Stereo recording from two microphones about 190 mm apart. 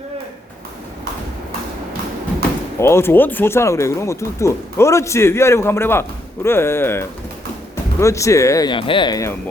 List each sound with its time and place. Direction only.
2.7 s speech: 15° left (ahead or behind)